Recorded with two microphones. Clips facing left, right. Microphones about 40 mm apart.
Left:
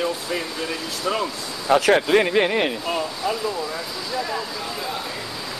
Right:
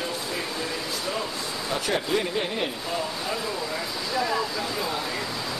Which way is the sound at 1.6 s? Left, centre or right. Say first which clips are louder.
Left 11 dB; left.